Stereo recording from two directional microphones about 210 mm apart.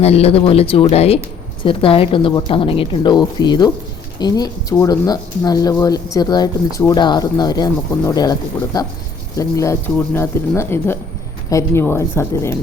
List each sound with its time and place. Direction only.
0.0 s speech: 30° left (ahead or behind); by 12.5 s 10° left (ahead or behind)